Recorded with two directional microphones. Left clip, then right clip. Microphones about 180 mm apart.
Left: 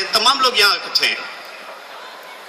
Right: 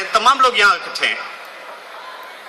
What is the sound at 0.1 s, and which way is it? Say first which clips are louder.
A man's voice: right 3 dB; 35° left (ahead or behind).